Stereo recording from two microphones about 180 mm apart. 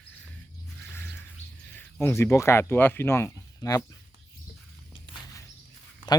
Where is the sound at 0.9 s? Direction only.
10° left (ahead or behind).